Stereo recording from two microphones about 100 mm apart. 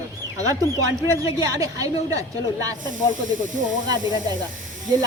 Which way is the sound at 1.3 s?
35° right (ahead or behind).